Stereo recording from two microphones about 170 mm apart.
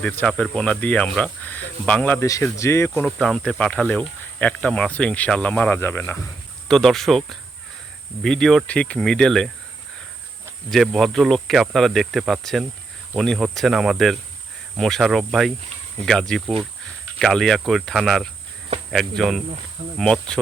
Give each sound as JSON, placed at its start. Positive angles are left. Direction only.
{"t": 0.0, "sound": "speech", "side_deg": 5}
{"t": 3.2, "sound": "speech", "side_deg": 5}
{"t": 6.7, "sound": "speech", "side_deg": 0}
{"t": 10.7, "sound": "speech", "side_deg": 0}